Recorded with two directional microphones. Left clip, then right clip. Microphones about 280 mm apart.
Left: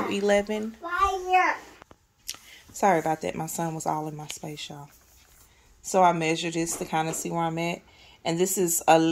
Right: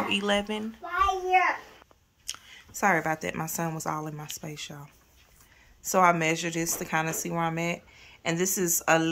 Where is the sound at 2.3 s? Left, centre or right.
Centre.